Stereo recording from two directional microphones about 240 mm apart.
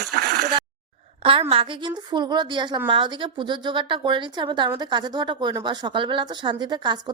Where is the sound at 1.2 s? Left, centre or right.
Right.